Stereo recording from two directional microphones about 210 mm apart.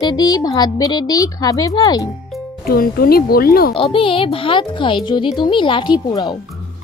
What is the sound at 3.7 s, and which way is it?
Speech, 25° left (ahead or behind).